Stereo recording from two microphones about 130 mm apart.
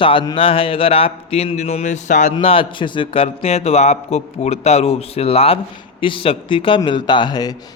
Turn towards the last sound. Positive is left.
turn(degrees=30)  # may be behind; listen again after turning